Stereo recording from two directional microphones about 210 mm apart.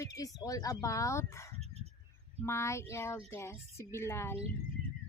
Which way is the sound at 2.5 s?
15° left (ahead or behind).